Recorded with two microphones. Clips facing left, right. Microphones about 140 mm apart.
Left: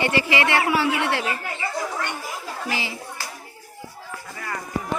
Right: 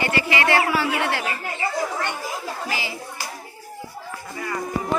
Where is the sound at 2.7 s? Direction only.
25° left (ahead or behind).